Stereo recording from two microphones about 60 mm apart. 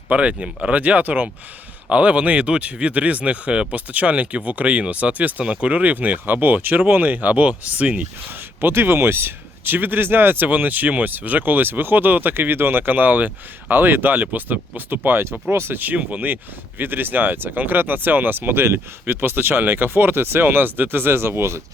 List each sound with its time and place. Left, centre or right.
0.1 s speech: centre; by 15.8 s right
15.8 s speech: right